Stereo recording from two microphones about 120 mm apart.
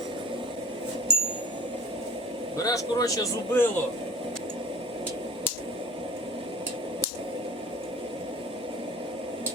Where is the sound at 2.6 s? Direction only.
30° left (ahead or behind).